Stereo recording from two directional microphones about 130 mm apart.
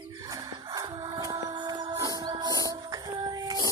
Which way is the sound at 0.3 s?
30° right (ahead or behind).